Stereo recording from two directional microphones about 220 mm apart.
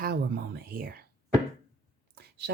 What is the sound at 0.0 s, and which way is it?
Whispering, 45° right (ahead or behind).